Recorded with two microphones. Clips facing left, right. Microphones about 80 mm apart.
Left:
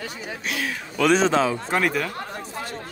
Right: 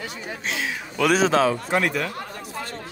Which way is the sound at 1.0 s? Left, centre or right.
Centre.